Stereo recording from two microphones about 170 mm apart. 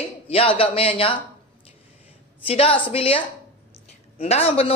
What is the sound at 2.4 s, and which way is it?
A man's voice, 35° left (ahead or behind).